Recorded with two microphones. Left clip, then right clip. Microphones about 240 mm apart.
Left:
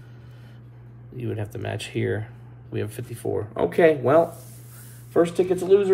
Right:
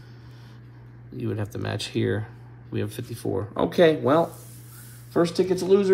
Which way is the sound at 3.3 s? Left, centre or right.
Centre.